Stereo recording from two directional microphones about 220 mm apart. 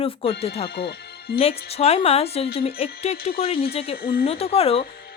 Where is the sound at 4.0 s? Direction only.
45° left (ahead or behind).